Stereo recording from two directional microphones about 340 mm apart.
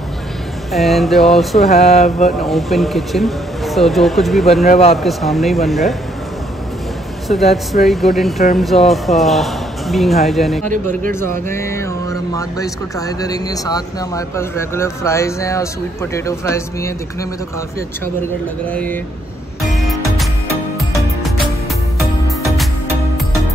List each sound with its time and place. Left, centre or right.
0.7 s speech: centre
1.7 s a sound: centre
2.4 s speech: centre
4.6 s speech: centre
4.9 s speech: centre
7.5 s speech: centre
10.7 s a man's voice: right
11.1 s speech: centre
18.7 s speech: centre
19.6 s music: centre